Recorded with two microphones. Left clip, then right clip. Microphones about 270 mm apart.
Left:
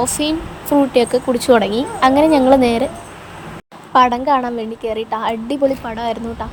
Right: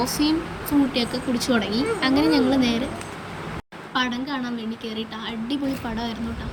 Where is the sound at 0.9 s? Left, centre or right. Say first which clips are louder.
Left 11 dB; centre.